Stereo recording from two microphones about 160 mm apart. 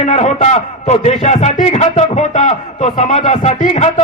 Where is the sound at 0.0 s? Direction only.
45° left (ahead or behind).